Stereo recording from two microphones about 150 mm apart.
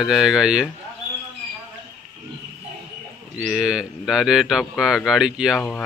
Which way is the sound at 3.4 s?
5° right (ahead or behind).